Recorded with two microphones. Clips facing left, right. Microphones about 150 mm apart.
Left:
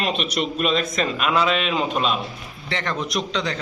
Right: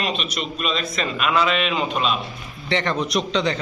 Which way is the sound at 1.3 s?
35° left (ahead or behind).